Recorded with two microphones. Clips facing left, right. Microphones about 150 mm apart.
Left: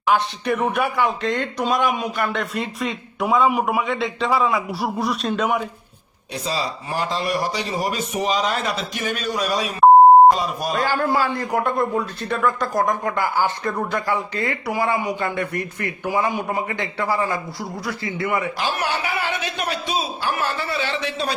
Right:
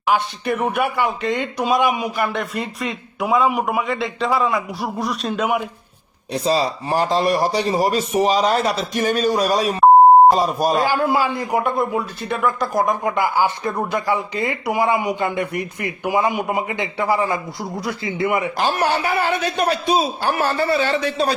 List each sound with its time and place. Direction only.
0.1 s speech: centre (ahead or behind)
6.3 s a man's voice: 40° right (ahead or behind)
10.8 s a man's voice: 10° right (ahead or behind)
18.5 s a man's voice: 45° right (ahead or behind)